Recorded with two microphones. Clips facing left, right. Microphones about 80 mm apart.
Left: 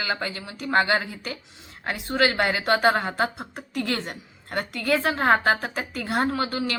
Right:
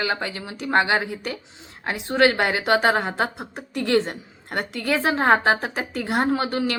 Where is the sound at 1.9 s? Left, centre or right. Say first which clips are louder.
Right 4 dB; right.